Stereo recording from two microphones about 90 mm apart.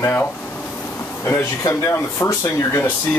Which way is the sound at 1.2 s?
30° left (ahead or behind).